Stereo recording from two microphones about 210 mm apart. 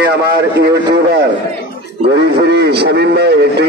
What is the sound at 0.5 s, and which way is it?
Speech, 50° right (ahead or behind).